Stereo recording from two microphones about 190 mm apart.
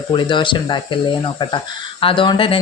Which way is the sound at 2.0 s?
25° left (ahead or behind).